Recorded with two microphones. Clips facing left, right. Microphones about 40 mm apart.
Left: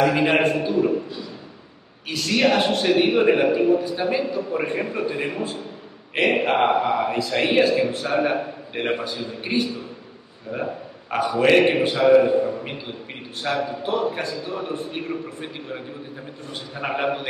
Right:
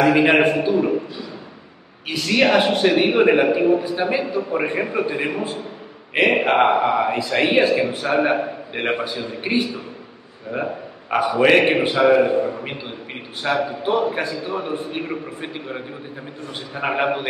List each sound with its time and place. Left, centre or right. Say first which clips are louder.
0.0 s a man's voice: right 4 dB; right
2.0 s a man's voice: right 2 dB; centre
10.5 s a sound: right 2 dB; right
11.3 s a man's voice: right 1 dB; right